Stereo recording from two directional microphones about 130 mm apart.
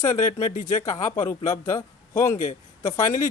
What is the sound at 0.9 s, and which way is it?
A man's voice, 20° left (ahead or behind).